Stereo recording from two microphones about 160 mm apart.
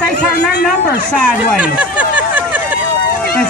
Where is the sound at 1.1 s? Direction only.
5° left (ahead or behind).